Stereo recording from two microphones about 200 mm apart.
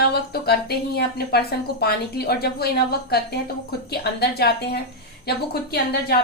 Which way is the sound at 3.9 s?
50° left (ahead or behind).